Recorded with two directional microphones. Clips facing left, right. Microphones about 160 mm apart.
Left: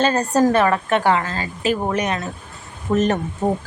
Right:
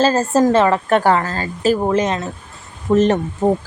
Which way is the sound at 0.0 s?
25° right (ahead or behind).